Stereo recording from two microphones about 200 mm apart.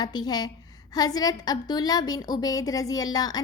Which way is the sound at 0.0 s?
20° left (ahead or behind).